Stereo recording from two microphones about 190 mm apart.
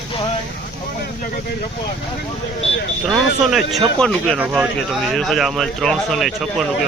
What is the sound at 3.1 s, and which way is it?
Speech, centre (ahead or behind).